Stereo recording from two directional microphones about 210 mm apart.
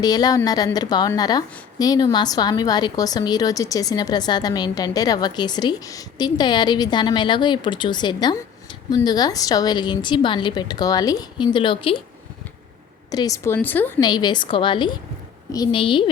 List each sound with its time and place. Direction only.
0.0 s a woman's voice: 20° left (ahead or behind)
13.1 s speech: 15° left (ahead or behind)
14.1 s a woman's voice: 20° left (ahead or behind)